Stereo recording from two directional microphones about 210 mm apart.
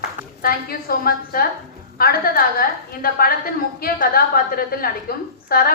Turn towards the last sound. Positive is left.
turn(degrees=45)  # may be behind; listen again after turning